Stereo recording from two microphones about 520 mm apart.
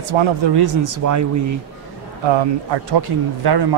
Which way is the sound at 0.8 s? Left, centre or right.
Right.